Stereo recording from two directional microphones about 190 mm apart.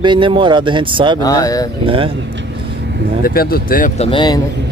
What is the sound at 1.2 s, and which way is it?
Speech, 20° left (ahead or behind).